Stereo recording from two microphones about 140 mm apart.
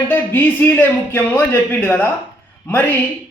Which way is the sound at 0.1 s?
15° left (ahead or behind).